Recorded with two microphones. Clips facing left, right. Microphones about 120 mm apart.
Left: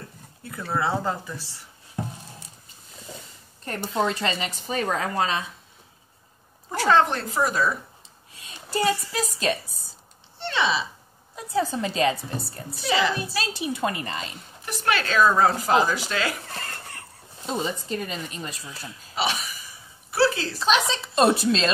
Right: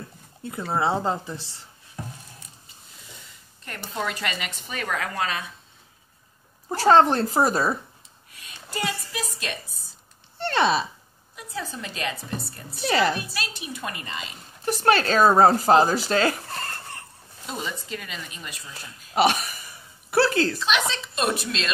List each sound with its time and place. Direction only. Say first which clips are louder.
0.4 s speech: right 2 dB; 25° right (ahead or behind)
2.0 s a sound: left 5 dB; 25° left (ahead or behind)
3.6 s speech: left 5 dB; 35° left (ahead or behind)
6.7 s a woman's voice: right 3 dB; 35° right (ahead or behind)
8.3 s a sound: left 1 dB; 30° left (ahead or behind)
10.4 s a sound: right 3 dB; 50° right (ahead or behind)
11.3 s speech: left 9 dB; 35° left (ahead or behind)
12.8 s a woman's voice: right 1 dB; 50° right (ahead or behind)
13.4 s speech: left 7 dB; 30° left (ahead or behind)
14.6 s speech: right 5 dB; 35° right (ahead or behind)
17.4 s speech: left 5 dB; 25° left (ahead or behind)
19.1 s a sound: right 7 dB; 55° right (ahead or behind)
20.5 s speech: left 3 dB; 35° left (ahead or behind)